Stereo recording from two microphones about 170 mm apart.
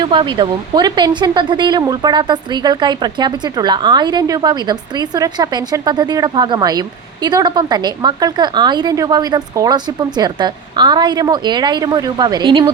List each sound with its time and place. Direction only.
0.0 s speech: 30° right (ahead or behind)